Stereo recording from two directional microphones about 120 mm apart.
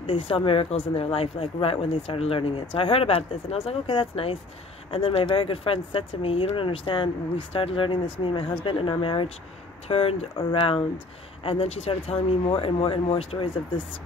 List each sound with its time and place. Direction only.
0.0 s speech: 50° left (ahead or behind)